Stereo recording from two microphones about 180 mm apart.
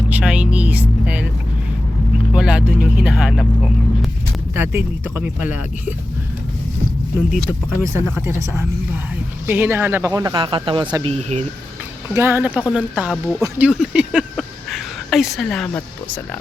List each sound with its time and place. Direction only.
0.1 s a sound: 5° right (ahead or behind)
2.3 s speech: 5° right (ahead or behind)
4.5 s speech: 10° right (ahead or behind)
8.2 s speech: 15° right (ahead or behind)
11.1 s speech: 40° right (ahead or behind)
12.1 s speech: 15° right (ahead or behind); by 16.4 s 10° left (ahead or behind)